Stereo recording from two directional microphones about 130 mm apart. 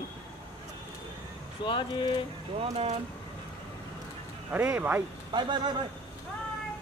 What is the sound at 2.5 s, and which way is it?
Speech, 55° right (ahead or behind).